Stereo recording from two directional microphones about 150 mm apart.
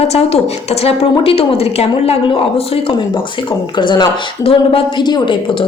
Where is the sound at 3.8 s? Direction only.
30° left (ahead or behind).